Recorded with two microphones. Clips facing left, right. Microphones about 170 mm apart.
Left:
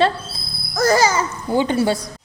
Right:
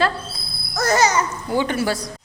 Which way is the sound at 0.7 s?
30° left (ahead or behind).